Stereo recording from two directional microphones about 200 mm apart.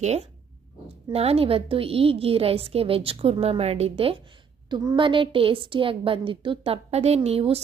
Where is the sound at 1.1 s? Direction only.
30° right (ahead or behind).